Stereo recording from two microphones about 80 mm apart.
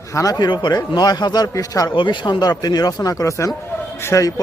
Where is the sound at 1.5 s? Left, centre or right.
Left.